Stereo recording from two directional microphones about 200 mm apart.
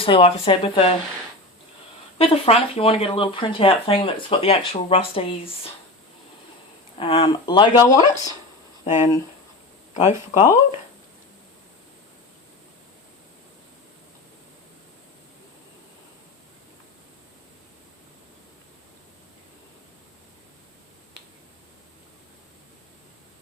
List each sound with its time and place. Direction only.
0.0 s speech: 30° left (ahead or behind)
2.1 s speech: 30° left (ahead or behind)
7.0 s speech: 25° left (ahead or behind)
9.9 s speech: 35° left (ahead or behind)